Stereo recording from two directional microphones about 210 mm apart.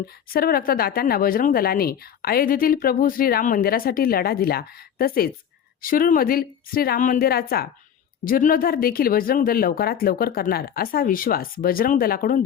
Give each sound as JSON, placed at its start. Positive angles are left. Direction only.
{"t": 0.3, "sound": "speech", "side_deg": 45}